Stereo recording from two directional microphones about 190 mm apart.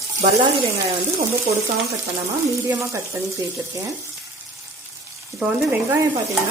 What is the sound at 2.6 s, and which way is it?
Speech, 15° right (ahead or behind).